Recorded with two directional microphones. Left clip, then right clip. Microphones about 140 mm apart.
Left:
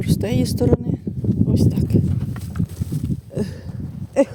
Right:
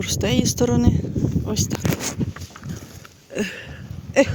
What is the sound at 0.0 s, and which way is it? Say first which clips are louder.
Speech: right 1 dB; 10° left (ahead or behind).